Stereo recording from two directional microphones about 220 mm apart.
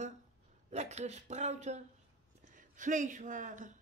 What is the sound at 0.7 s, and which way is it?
Speech, 30° right (ahead or behind).